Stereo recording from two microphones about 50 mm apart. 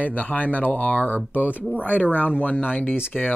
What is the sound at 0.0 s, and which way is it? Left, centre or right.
Speech, left.